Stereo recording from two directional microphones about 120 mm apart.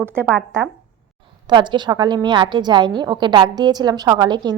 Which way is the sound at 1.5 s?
40° right (ahead or behind).